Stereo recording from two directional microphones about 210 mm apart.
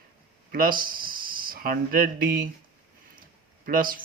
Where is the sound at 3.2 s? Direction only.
40° right (ahead or behind).